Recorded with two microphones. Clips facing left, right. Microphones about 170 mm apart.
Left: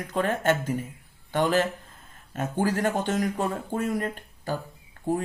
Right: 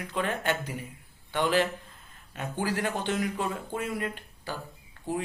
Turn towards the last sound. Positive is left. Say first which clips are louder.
# left 5 dB
turn(degrees=50)  # may be behind; listen again after turning